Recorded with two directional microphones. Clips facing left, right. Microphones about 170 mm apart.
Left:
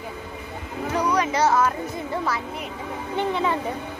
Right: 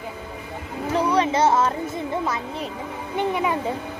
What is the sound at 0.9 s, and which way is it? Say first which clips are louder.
Music: right 2 dB; 25° right (ahead or behind).